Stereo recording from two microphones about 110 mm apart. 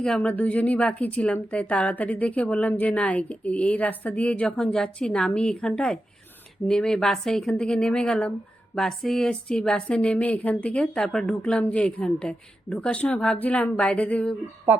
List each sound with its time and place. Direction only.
0.0 s a woman's voice: 10° left (ahead or behind)